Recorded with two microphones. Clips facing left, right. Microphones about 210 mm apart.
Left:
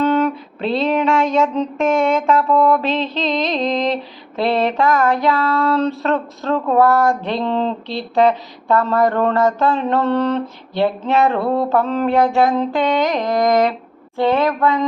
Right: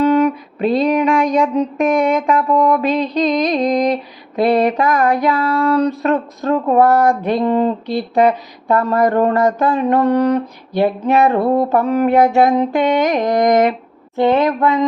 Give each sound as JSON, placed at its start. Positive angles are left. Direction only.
{"t": 0.0, "sound": "music", "side_deg": -10}
{"t": 0.7, "sound": "mantra", "side_deg": -15}
{"t": 14.2, "sound": "speech", "side_deg": -20}